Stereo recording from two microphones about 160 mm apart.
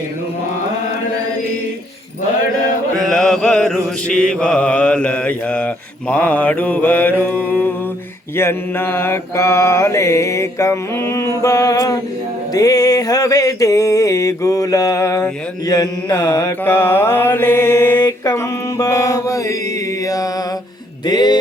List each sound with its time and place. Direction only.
3.1 s mantra: 5° left (ahead or behind); by 11.9 s 20° left (ahead or behind)
12.5 s music: 25° left (ahead or behind)
18.0 s mantra: 25° left (ahead or behind)
21.1 s a sound: 25° left (ahead or behind)